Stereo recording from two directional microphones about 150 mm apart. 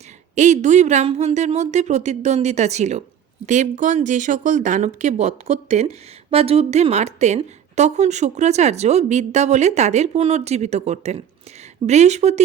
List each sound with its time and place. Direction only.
0.3 s a woman's voice: 55° right (ahead or behind)